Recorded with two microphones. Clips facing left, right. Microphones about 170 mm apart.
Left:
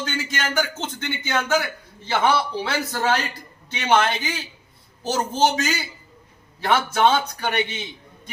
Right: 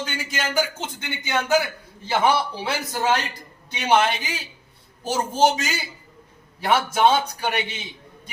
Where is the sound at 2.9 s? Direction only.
15° right (ahead or behind).